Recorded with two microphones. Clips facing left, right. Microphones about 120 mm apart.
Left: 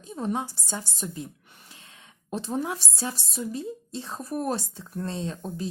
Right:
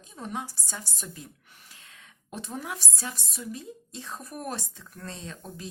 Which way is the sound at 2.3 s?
30° left (ahead or behind).